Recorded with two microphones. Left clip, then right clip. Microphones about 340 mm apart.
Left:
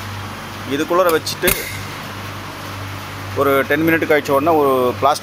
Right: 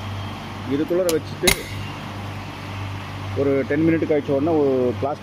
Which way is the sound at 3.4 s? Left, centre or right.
Left.